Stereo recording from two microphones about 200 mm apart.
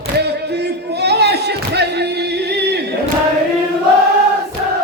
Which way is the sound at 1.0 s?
55° right (ahead or behind).